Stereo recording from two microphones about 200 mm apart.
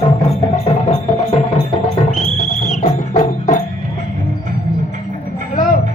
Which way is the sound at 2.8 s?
40° left (ahead or behind).